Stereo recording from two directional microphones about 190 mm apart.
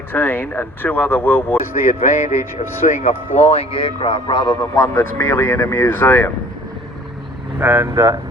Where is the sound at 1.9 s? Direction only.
40° left (ahead or behind); by 6.3 s 10° left (ahead or behind).